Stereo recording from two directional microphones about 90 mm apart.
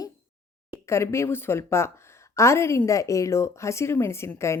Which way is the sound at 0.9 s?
30° left (ahead or behind).